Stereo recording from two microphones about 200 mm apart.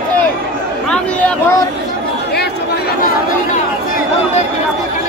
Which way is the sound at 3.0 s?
45° left (ahead or behind).